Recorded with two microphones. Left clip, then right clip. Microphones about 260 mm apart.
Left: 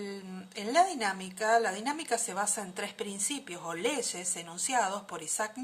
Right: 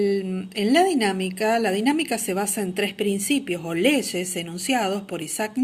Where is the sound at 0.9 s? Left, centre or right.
Left.